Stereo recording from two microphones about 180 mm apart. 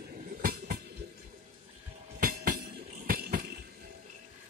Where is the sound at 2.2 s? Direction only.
55° right (ahead or behind).